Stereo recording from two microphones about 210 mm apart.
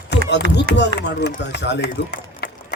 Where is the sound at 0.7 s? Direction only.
50° right (ahead or behind).